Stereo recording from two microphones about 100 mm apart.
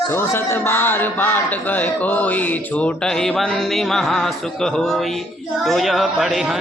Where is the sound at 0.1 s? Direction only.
25° left (ahead or behind); by 5.1 s 5° left (ahead or behind).